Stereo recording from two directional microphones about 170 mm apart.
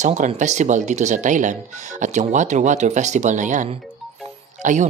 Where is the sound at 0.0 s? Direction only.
45° right (ahead or behind).